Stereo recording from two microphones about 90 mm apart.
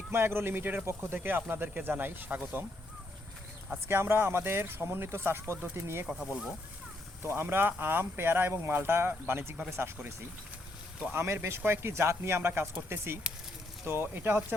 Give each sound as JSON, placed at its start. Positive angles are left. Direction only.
{"t": 0.1, "sound": "speech", "side_deg": -25}
{"t": 3.7, "sound": "speech", "side_deg": -25}
{"t": 6.1, "sound": "speech", "side_deg": -10}
{"t": 7.2, "sound": "speech", "side_deg": -25}